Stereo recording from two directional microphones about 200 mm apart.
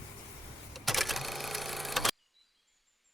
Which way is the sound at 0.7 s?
Centre (ahead or behind).